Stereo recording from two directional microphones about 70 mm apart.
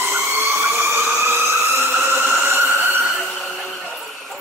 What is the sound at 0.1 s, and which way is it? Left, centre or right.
Fire engine, right.